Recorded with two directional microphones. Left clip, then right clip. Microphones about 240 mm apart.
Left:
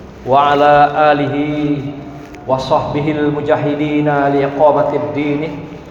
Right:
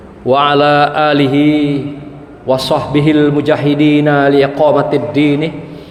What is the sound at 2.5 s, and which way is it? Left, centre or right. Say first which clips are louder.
A man's voice: right 2 dB; right.